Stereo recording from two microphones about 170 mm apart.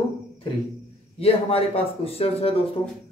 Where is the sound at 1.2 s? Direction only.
35° left (ahead or behind).